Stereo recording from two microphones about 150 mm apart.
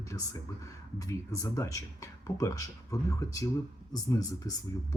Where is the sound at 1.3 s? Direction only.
20° left (ahead or behind).